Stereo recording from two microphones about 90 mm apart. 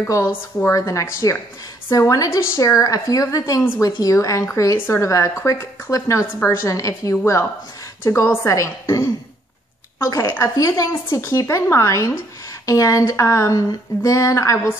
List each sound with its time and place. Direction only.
0.1 s a woman's voice: 30° left (ahead or behind)